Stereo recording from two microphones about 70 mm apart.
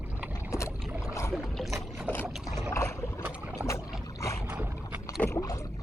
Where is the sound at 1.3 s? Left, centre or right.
Centre.